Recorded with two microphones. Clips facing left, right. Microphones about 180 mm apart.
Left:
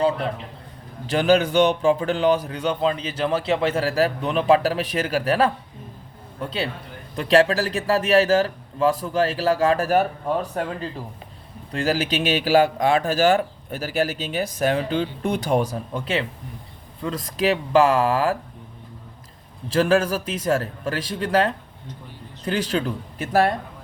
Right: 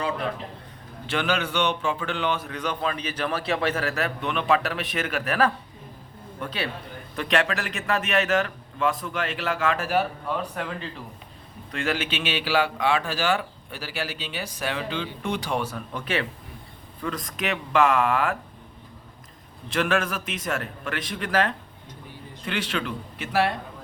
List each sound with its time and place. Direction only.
1.0 s a man's voice: 40° left (ahead or behind)
19.7 s speech: 35° left (ahead or behind)